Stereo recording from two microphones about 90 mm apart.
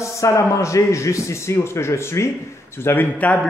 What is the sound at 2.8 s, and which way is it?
Speech, 20° left (ahead or behind).